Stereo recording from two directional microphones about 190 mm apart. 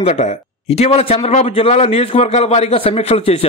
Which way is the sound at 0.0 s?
35° left (ahead or behind).